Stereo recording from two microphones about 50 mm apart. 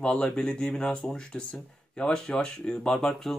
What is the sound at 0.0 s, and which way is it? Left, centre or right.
Speech, centre.